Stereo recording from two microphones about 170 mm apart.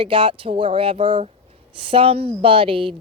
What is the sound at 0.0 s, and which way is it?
Speech, 30° right (ahead or behind).